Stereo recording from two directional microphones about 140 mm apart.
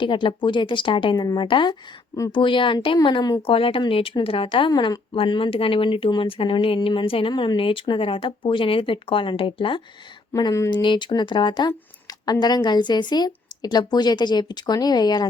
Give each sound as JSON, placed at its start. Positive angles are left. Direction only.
{"t": 0.0, "sound": "speech", "side_deg": 35}
{"t": 10.3, "sound": "speech", "side_deg": 25}